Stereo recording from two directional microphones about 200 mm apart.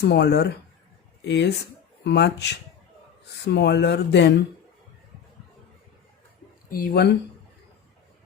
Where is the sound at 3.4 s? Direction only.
55° left (ahead or behind).